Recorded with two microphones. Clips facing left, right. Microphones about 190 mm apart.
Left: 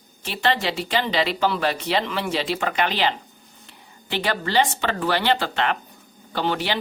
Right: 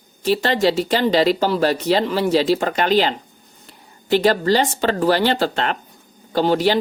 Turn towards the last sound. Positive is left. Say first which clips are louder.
# right 8 dB
turn(degrees=-40)  # may be behind; listen again after turning